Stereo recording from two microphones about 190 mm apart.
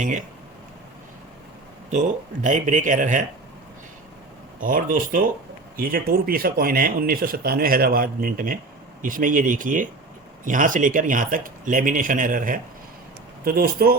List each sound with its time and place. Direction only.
0.0 s speech: 40° right (ahead or behind)
1.9 s speech: 40° right (ahead or behind)
4.6 s speech: 45° right (ahead or behind)